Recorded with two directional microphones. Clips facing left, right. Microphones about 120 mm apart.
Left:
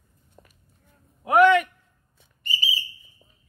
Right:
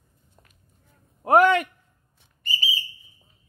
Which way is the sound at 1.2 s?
40° right (ahead or behind).